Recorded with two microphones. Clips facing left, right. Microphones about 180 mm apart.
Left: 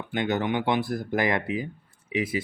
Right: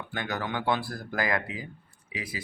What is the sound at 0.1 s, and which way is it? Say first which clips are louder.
Speech: left 7 dB; 20° left (ahead or behind).